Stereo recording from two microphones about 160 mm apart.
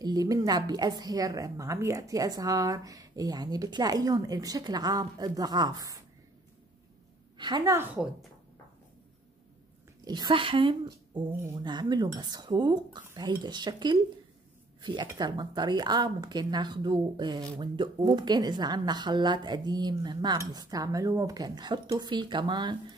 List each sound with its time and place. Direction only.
0.0 s a woman's voice: 25° right (ahead or behind)
7.3 s a woman's voice: 25° right (ahead or behind); by 8.3 s 5° right (ahead or behind)
10.0 s a woman's voice: 25° right (ahead or behind)